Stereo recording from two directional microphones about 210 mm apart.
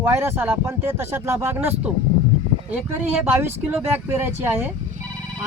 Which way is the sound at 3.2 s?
10° right (ahead or behind).